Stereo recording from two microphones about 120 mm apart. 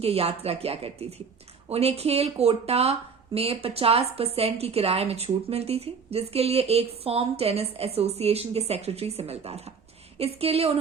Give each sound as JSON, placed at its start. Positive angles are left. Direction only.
{"t": 0.0, "sound": "a woman's voice", "side_deg": -55}